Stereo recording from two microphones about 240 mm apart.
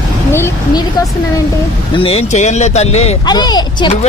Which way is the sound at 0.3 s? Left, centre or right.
Centre.